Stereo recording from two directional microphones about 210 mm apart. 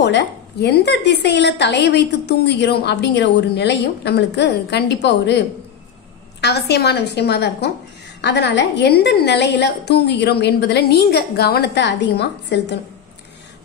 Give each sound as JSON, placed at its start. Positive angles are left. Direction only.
{"t": 0.0, "sound": "a woman's voice", "side_deg": 55}
{"t": 6.4, "sound": "a woman's voice", "side_deg": 50}